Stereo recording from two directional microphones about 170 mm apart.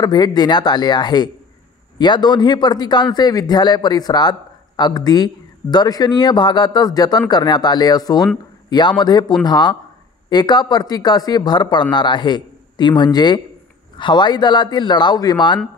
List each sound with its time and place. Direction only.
0.0 s speech: 25° left (ahead or behind)